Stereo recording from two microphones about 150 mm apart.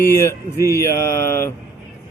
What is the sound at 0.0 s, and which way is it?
A man's voice, 15° left (ahead or behind).